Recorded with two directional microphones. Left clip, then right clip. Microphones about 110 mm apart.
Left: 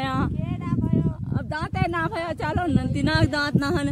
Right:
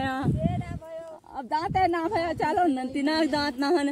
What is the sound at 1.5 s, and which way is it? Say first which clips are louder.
Speech: right 3 dB; 20° left (ahead or behind).